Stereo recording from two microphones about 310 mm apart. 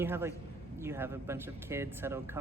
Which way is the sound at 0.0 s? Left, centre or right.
Centre.